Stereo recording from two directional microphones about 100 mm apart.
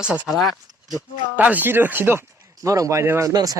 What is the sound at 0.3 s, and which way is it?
Speech, centre (ahead or behind).